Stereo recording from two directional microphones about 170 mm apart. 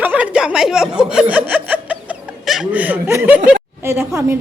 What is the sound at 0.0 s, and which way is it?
Speech, 10° right (ahead or behind).